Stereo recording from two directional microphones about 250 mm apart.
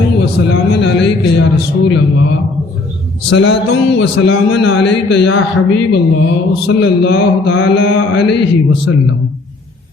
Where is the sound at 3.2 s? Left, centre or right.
Left.